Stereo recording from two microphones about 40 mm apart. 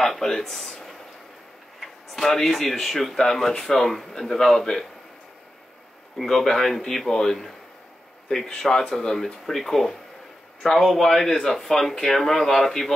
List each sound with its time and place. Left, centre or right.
0.0 s a sound: centre
2.2 s a man's voice: centre
6.1 s a man's voice: centre
8.5 s a man's voice: centre